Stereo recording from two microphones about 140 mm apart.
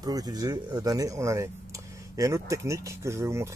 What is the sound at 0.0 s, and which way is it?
Speech, 25° right (ahead or behind).